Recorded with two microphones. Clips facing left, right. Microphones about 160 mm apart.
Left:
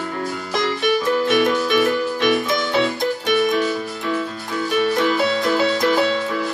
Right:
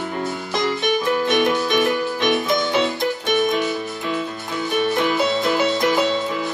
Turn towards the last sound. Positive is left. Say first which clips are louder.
# left 1 dB
turn(degrees=-20)  # may be behind; listen again after turning